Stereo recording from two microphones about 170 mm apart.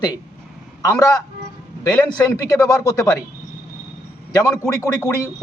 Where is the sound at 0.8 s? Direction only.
20° left (ahead or behind).